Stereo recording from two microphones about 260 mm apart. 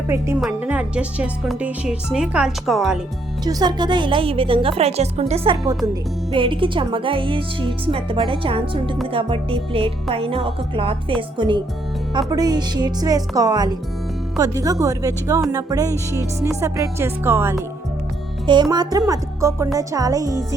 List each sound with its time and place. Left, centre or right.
0.1 s speech: centre
3.4 s speech: centre